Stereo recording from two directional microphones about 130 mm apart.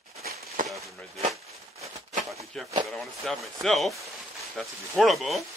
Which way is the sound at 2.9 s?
Centre (ahead or behind).